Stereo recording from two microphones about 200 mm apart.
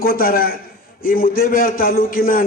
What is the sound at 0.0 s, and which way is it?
A man's voice, 45° left (ahead or behind).